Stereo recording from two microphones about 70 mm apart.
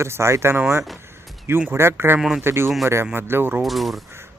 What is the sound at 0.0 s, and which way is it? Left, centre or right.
Speech, right.